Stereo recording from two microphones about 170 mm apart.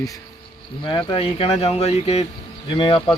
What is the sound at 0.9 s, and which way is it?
Speech, 25° left (ahead or behind).